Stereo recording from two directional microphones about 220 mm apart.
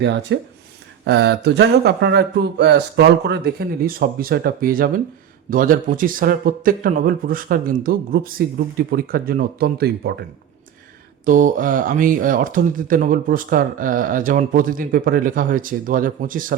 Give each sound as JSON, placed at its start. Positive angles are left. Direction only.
{"t": 0.0, "sound": "speech", "side_deg": -55}
{"t": 11.3, "sound": "speech", "side_deg": -35}